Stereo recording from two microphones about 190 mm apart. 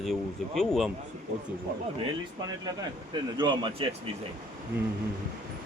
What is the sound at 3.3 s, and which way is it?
Speech, 25° right (ahead or behind).